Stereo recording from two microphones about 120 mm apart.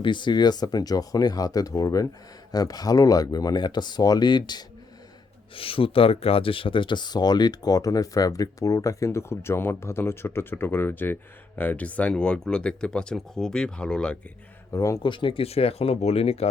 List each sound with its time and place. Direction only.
0.0 s speech: 40° left (ahead or behind)
5.5 s speech: 50° left (ahead or behind); by 14.2 s 10° left (ahead or behind)
14.7 s speech: 25° left (ahead or behind)
15.0 s speech: 45° left (ahead or behind); by 16.5 s 60° left (ahead or behind)